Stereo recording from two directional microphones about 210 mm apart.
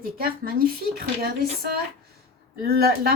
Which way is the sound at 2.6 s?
45° right (ahead or behind).